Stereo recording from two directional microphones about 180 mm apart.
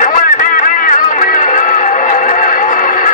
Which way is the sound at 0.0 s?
45° left (ahead or behind).